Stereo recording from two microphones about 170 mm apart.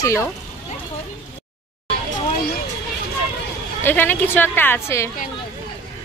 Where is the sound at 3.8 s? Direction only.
10° left (ahead or behind).